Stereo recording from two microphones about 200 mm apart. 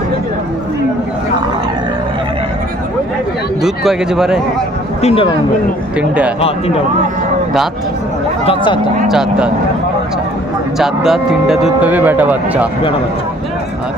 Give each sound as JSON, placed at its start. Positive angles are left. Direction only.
{"t": 3.6, "sound": "speech", "side_deg": 0}
{"t": 5.0, "sound": "speech", "side_deg": 25}
{"t": 6.0, "sound": "speech", "side_deg": -5}
{"t": 8.4, "sound": "speech", "side_deg": 25}
{"t": 9.0, "sound": "speech", "side_deg": -5}
{"t": 10.8, "sound": "speech", "side_deg": 0}